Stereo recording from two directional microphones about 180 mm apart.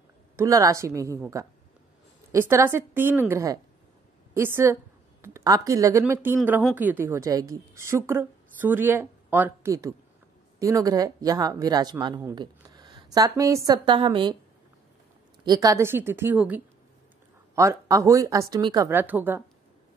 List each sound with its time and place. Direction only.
0.4 s a woman's voice: 15° right (ahead or behind)
13.8 s speech: 25° right (ahead or behind)
15.4 s a woman's voice: 20° right (ahead or behind)
18.9 s a woman's voice: 10° right (ahead or behind)